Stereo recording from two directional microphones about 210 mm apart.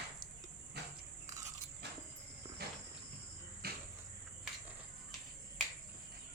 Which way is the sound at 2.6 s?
50° right (ahead or behind).